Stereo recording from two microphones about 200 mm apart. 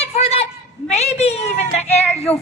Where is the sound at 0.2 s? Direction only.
30° left (ahead or behind).